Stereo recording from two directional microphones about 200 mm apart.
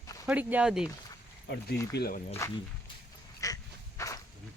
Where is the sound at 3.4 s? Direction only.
15° left (ahead or behind).